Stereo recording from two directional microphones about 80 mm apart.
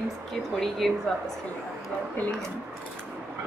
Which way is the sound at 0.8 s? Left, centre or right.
Centre.